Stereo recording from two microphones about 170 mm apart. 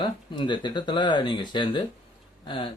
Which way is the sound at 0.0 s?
25° left (ahead or behind).